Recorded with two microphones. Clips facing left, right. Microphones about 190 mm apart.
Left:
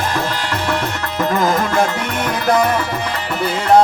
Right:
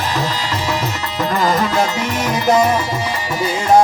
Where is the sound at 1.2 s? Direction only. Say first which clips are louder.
Even; 50° left (ahead or behind).